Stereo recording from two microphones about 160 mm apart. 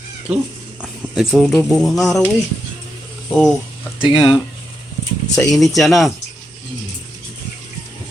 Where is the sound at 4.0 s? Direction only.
25° left (ahead or behind).